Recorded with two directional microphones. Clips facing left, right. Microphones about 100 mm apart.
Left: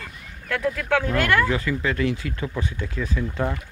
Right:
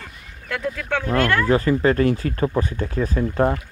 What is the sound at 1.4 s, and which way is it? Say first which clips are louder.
Speech: right 7 dB; 40° right (ahead or behind).